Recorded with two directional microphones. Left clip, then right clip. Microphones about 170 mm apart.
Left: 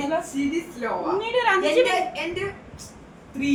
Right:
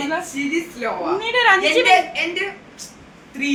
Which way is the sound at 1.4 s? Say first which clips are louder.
Right 6 dB; 30° right (ahead or behind).